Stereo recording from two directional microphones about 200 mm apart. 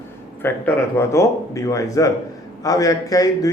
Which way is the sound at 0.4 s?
10° left (ahead or behind).